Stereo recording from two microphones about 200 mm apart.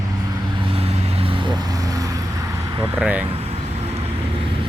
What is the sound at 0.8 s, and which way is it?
Vehicle, 30° right (ahead or behind).